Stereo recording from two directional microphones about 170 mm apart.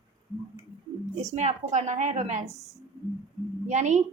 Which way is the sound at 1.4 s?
45° right (ahead or behind).